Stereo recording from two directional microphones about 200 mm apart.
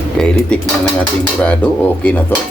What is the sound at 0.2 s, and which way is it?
Speech, 5° left (ahead or behind).